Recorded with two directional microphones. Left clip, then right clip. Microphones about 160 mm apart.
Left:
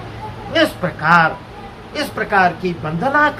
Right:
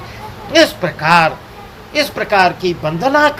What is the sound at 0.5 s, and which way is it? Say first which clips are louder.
A man's voice: right 5 dB; 45° right (ahead or behind).